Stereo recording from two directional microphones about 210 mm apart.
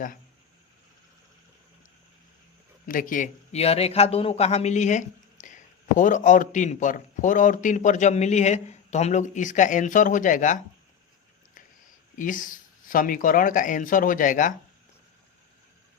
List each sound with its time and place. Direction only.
2.8 s a man's voice: 40° left (ahead or behind)
12.1 s a man's voice: 40° left (ahead or behind)